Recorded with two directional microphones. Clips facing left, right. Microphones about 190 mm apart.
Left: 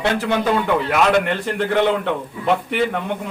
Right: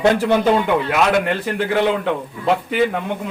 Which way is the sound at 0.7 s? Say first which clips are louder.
Even; 5° right (ahead or behind).